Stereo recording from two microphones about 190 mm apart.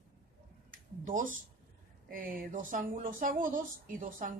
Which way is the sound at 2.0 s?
50° right (ahead or behind).